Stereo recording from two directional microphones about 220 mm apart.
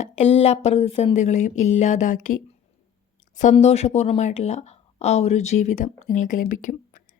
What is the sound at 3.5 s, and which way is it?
Speech, 30° left (ahead or behind).